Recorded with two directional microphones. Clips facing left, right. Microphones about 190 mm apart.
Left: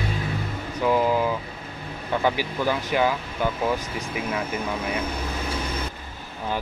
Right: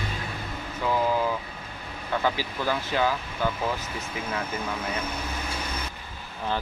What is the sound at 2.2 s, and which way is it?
Speech, 15° left (ahead or behind).